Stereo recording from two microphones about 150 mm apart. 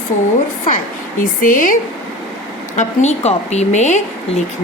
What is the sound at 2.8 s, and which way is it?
A woman's voice, 50° left (ahead or behind).